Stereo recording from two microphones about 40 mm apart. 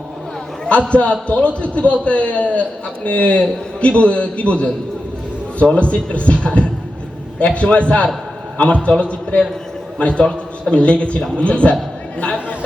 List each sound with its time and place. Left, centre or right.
0.7 s a man's voice: left